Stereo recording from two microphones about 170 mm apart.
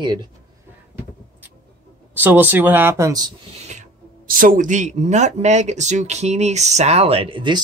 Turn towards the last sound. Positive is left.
turn(degrees=-30)  # may be behind; listen again after turning